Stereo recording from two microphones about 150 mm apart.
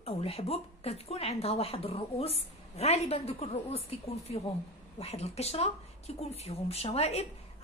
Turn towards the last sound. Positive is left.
turn(degrees=45)  # may be behind; listen again after turning